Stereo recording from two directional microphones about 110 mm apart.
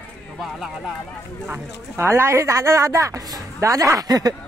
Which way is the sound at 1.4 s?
20° right (ahead or behind).